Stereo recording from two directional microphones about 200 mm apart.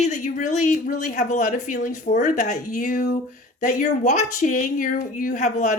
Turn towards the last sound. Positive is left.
turn(degrees=35)  # may be behind; listen again after turning